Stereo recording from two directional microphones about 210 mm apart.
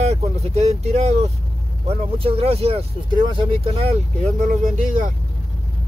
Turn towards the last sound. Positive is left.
turn(degrees=-40)  # may be behind; listen again after turning